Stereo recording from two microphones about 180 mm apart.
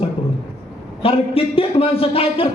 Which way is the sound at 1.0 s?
30° left (ahead or behind).